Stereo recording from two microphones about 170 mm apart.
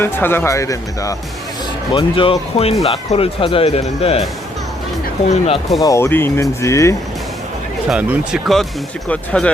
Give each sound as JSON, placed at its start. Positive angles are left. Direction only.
{"t": 0.0, "sound": "speech", "side_deg": 15}
{"t": 1.9, "sound": "speech", "side_deg": 30}
{"t": 5.8, "sound": "speech", "side_deg": 15}
{"t": 7.9, "sound": "speech", "side_deg": -5}